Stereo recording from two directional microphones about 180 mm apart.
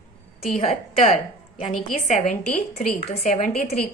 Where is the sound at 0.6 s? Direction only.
35° left (ahead or behind).